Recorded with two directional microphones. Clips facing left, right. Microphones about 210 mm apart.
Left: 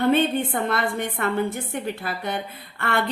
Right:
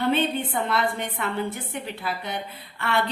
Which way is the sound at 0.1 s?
50° left (ahead or behind).